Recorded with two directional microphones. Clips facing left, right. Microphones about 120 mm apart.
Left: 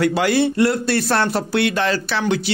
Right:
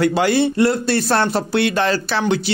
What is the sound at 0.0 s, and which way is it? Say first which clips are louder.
Speech: right 1 dB; 30° right (ahead or behind).